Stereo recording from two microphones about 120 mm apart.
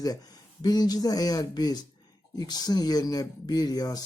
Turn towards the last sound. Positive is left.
turn(degrees=35)  # may be behind; listen again after turning